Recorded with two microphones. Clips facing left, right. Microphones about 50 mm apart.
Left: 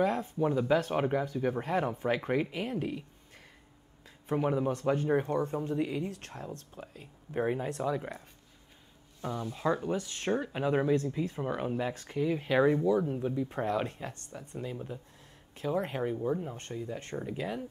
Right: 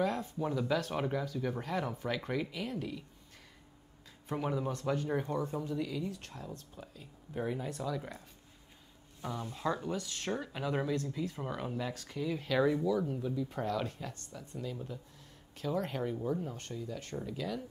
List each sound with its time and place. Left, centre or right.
0.2 s speech: left
4.3 s speech: left
9.3 s speech: left